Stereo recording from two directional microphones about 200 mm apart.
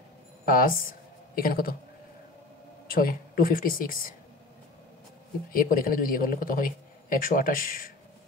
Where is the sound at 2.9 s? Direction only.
45° left (ahead or behind).